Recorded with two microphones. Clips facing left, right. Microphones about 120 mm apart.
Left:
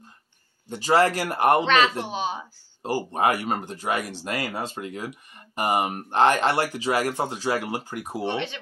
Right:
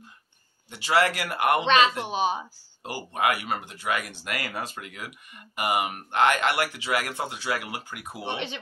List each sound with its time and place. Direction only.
0.7 s speech: 40° left (ahead or behind)
1.6 s a man's voice: 20° right (ahead or behind)
2.8 s speech: 35° left (ahead or behind)
8.2 s speech: 15° right (ahead or behind)